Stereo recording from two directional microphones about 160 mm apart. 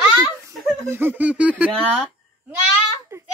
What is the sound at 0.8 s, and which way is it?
Speech, 15° right (ahead or behind).